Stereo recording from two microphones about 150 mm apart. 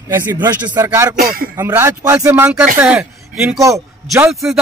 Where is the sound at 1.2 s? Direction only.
85° right.